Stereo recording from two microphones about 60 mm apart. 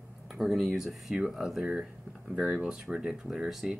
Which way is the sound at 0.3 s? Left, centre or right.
Centre.